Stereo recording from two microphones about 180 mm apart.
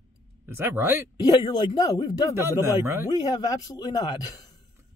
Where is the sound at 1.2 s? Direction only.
25° left (ahead or behind).